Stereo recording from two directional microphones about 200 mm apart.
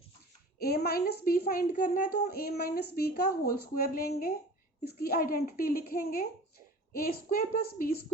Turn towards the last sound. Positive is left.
turn(degrees=45)  # may be behind; listen again after turning